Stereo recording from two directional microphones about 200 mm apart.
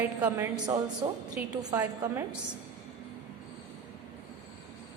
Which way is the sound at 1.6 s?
15° right (ahead or behind).